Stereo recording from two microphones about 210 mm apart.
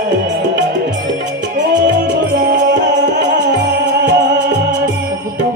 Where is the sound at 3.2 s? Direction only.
55° right (ahead or behind).